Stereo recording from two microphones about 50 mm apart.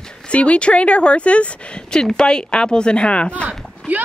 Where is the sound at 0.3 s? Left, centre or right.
Left.